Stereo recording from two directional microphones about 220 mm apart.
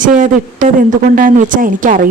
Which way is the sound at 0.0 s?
35° right (ahead or behind).